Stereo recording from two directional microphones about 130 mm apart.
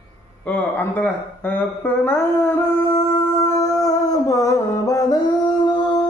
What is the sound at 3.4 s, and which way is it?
Music, 25° left (ahead or behind).